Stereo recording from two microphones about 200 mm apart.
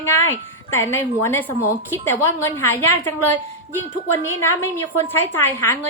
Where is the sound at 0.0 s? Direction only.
10° left (ahead or behind).